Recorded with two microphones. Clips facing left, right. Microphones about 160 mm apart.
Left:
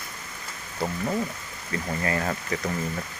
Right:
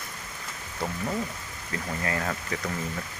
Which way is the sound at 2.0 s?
Centre (ahead or behind).